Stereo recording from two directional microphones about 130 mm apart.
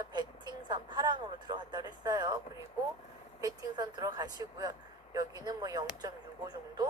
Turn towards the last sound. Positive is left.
turn(degrees=-30)  # may be behind; listen again after turning